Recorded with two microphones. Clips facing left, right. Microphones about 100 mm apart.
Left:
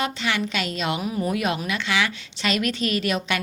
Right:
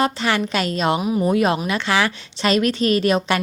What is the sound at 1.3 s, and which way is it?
A woman's voice, 35° right (ahead or behind).